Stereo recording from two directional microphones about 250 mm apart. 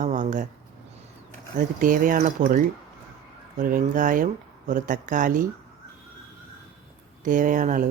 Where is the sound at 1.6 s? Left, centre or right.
Right.